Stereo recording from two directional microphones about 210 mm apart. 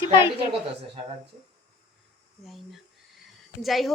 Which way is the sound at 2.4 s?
Centre (ahead or behind).